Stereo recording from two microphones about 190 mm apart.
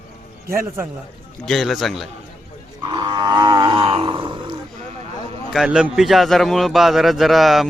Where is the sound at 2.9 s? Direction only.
20° right (ahead or behind).